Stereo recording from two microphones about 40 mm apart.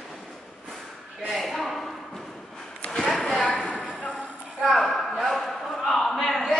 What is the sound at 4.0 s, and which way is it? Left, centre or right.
Clip-clop, left.